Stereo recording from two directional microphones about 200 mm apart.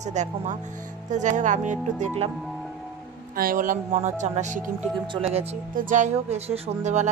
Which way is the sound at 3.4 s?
45° right (ahead or behind).